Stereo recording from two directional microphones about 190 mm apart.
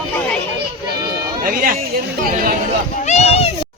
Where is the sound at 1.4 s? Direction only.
50° right (ahead or behind).